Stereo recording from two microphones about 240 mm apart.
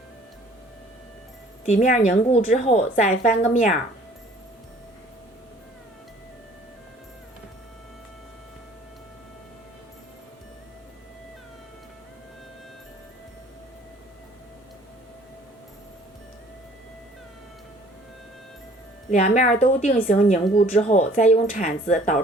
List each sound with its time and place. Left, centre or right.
1.6 s speech: left
19.1 s speech: left